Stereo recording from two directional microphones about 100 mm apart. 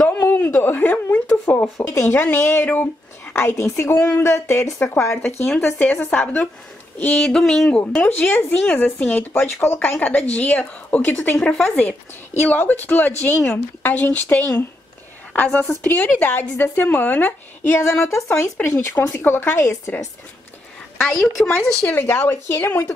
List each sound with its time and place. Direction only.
0.2 s speech: 20° left (ahead or behind)
11.1 s speech: 25° left (ahead or behind)
11.4 s speech: 5° left (ahead or behind)
12.4 s speech: 15° left (ahead or behind)
15.8 s speech: 15° left (ahead or behind)
18.0 s speech: 30° left (ahead or behind)
21.0 s a woman's voice: 5° left (ahead or behind)
21.5 s speech: 15° left (ahead or behind)